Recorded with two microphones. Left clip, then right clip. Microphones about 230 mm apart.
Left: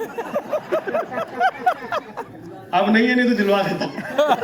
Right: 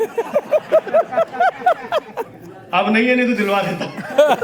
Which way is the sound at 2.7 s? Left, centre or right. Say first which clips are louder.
Right 2 dB; right.